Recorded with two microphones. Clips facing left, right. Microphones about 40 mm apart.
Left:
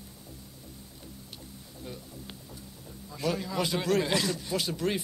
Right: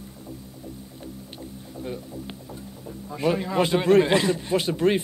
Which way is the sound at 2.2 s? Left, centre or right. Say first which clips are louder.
Right 8 dB; right.